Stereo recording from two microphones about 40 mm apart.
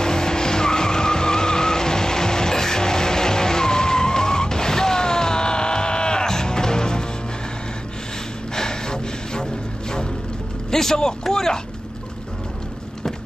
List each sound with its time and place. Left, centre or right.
0.0 s vehicle: centre
8.5 s music: centre
10.7 s speech: centre